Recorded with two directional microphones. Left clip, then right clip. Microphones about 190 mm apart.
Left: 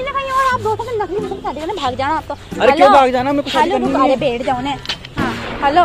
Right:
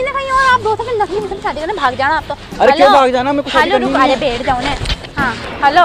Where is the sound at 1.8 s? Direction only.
40° left (ahead or behind).